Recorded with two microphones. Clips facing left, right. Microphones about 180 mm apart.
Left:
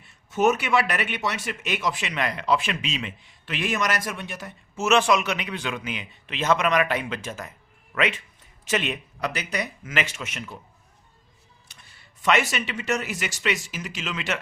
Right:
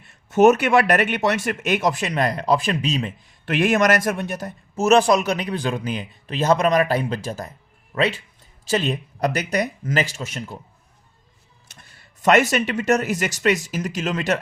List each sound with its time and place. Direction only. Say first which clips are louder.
0.3 s speech: right 7 dB; 50° right (ahead or behind)
3.5 s speech: right 9 dB; 50° right (ahead or behind)
11.7 s speech: right 7 dB; 45° right (ahead or behind)